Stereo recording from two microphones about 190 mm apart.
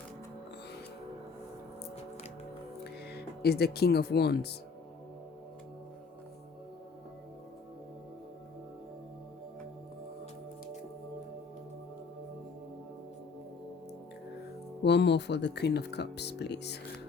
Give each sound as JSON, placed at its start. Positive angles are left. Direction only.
{"t": 2.8, "sound": "speech", "side_deg": 55}
{"t": 14.8, "sound": "speech", "side_deg": 65}